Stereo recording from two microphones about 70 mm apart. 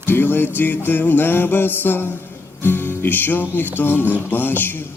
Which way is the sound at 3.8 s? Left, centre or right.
Left.